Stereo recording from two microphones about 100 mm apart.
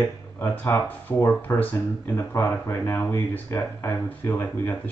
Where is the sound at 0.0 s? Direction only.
25° left (ahead or behind).